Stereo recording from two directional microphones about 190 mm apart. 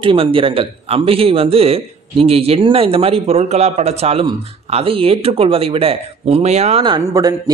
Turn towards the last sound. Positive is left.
turn(degrees=-20)  # may be behind; listen again after turning